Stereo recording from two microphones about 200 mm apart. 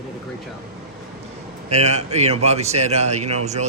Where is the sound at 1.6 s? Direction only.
35° right (ahead or behind).